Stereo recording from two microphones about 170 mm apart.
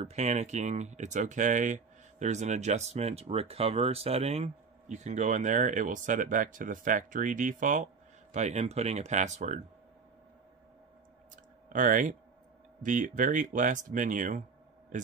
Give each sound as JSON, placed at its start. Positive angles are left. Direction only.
{"t": 0.0, "sound": "speech", "side_deg": -40}
{"t": 11.7, "sound": "speech", "side_deg": -50}